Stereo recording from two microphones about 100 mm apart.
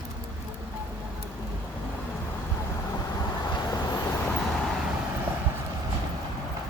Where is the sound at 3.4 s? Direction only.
40° left (ahead or behind).